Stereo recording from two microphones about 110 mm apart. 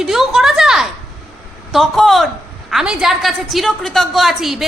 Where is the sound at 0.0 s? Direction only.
5° right (ahead or behind).